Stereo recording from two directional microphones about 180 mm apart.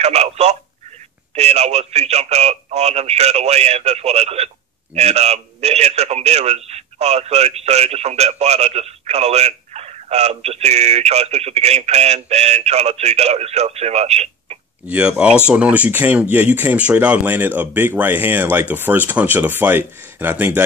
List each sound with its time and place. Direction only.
0.0 s speech: 35° right (ahead or behind)
14.9 s speech: 5° right (ahead or behind)